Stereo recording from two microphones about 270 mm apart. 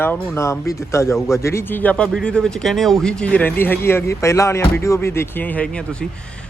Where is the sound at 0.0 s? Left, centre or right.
Centre.